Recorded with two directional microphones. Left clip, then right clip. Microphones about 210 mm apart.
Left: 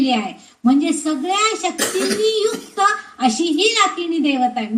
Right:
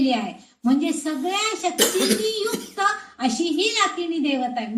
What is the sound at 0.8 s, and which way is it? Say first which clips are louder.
A child's voice: left 5 dB; 20° left (ahead or behind).